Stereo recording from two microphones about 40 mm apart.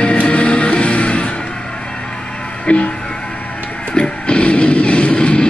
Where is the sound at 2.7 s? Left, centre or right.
Left.